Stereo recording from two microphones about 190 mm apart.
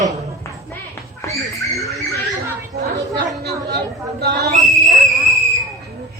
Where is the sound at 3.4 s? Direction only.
60° right (ahead or behind).